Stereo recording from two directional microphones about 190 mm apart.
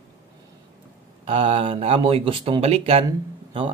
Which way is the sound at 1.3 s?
30° right (ahead or behind).